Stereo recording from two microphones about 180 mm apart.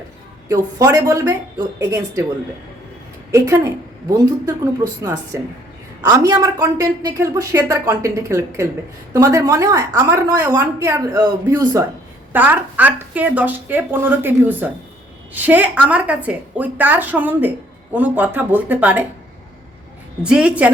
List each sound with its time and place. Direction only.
0.4 s speech: 20° right (ahead or behind)
3.3 s a woman's voice: 15° right (ahead or behind)
12.3 s speech: 10° right (ahead or behind)
20.2 s speech: 5° right (ahead or behind)